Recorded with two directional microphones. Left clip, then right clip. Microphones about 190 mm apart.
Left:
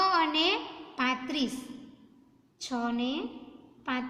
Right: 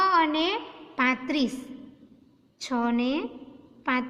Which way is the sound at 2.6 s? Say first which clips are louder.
Right 5 dB; 40° right (ahead or behind).